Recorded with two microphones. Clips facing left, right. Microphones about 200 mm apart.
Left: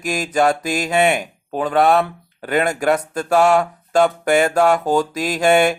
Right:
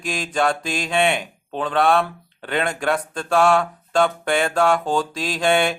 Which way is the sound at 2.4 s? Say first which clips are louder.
Left 5 dB; 10° left (ahead or behind).